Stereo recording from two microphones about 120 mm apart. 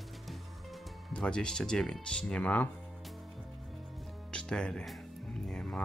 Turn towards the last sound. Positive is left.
turn(degrees=5)  # may be behind; listen again after turning